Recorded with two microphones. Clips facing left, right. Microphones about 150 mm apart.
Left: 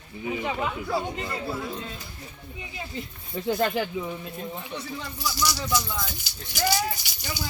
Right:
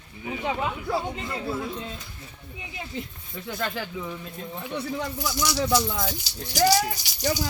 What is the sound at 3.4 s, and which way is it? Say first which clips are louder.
Speech: left 7 dB; 30° left (ahead or behind).